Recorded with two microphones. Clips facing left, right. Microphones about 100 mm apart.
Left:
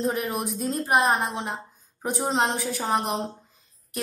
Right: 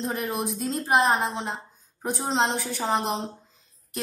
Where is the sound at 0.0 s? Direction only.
Centre (ahead or behind).